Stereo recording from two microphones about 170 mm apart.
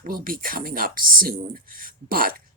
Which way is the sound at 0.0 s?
55° right (ahead or behind).